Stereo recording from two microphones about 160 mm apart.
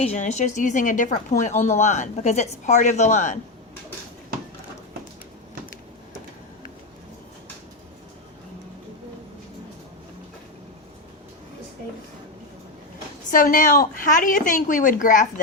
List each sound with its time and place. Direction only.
0.0 s speech: 45° left (ahead or behind)
13.3 s a woman's voice: 60° left (ahead or behind)